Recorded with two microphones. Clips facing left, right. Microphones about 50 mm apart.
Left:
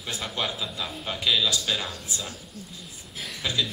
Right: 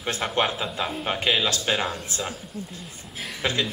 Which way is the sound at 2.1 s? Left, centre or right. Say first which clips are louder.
Right 4 dB; right.